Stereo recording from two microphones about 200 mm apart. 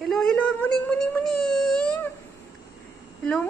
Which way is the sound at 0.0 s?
Centre (ahead or behind).